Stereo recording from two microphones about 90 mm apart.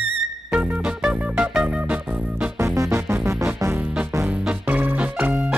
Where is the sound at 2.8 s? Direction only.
35° right (ahead or behind).